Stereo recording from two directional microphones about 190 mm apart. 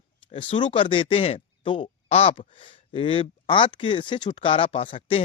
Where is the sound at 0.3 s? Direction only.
25° left (ahead or behind).